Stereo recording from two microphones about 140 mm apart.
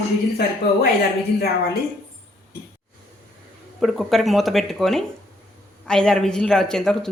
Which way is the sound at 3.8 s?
Centre (ahead or behind).